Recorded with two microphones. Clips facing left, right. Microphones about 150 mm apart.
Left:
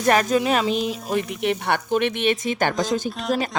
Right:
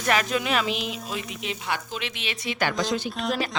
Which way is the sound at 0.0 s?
40° left (ahead or behind).